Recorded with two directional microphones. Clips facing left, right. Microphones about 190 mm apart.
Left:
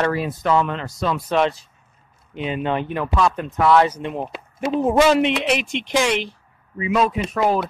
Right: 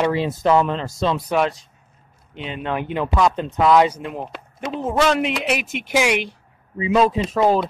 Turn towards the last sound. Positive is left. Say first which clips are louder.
# right 2 dB
turn(degrees=-30)  # may be behind; listen again after turning